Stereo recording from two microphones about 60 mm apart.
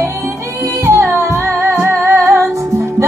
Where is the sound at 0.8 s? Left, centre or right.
Right.